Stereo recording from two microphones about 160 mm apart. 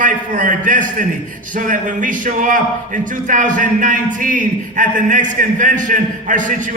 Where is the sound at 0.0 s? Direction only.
55° right (ahead or behind).